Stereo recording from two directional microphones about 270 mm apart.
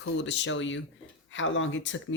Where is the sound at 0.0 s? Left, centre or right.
Left.